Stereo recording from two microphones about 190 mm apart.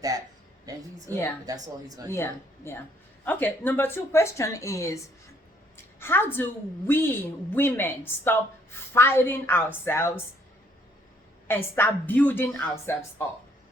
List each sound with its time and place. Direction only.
0.6 s a sound: 20° right (ahead or behind)
1.5 s speech: 20° right (ahead or behind)
2.0 s a woman's voice: 15° left (ahead or behind)
11.4 s a woman's voice: 10° left (ahead or behind)